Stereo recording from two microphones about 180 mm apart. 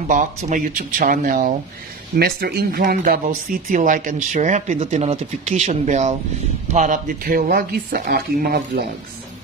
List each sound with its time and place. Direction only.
0.1 s speech: 45° right (ahead or behind)
2.1 s speech: 60° right (ahead or behind)